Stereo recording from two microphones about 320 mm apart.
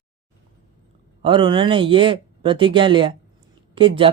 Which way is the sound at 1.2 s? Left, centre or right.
Centre.